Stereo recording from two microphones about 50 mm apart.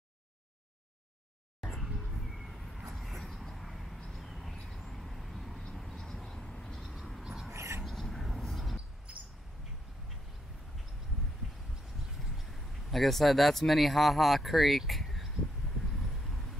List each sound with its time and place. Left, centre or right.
1.6 s vehicle: centre
4.0 s a sound: centre
4.6 s vehicle: centre
7.2 s a sound: centre
7.5 s bird: right
7.8 s vehicle: centre
12.4 s speech: centre
16.0 s vehicle: centre